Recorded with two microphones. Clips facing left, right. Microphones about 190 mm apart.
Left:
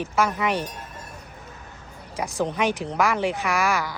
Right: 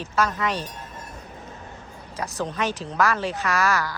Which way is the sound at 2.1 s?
10° left (ahead or behind).